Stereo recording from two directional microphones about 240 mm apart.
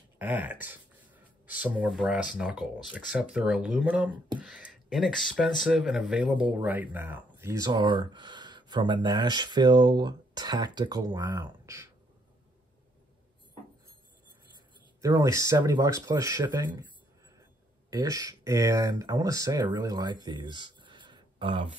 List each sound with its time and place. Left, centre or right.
0.2 s speech: centre
15.0 s speech: centre
17.8 s speech: centre